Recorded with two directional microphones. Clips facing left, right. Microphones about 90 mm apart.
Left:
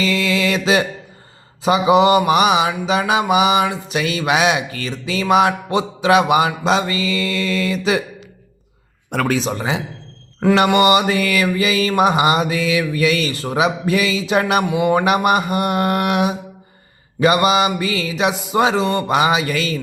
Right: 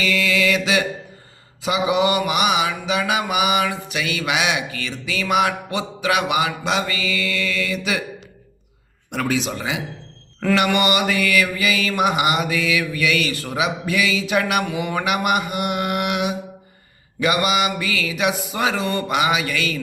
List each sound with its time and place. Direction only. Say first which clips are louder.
0.0 s mantra: left 2 dB; 30° left (ahead or behind)
9.0 s mantra: left 4 dB; 45° left (ahead or behind)